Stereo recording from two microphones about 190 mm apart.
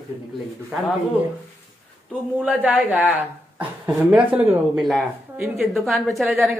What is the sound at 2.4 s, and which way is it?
Speech, 10° right (ahead or behind).